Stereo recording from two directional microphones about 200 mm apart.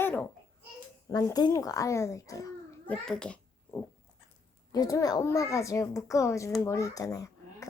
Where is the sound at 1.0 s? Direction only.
15° left (ahead or behind).